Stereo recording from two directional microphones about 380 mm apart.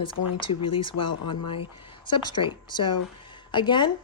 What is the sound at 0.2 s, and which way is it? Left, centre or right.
Speech, left.